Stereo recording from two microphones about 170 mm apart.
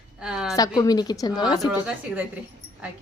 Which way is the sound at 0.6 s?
20° left (ahead or behind).